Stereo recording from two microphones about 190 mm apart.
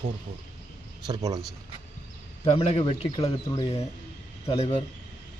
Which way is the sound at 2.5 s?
30° left (ahead or behind).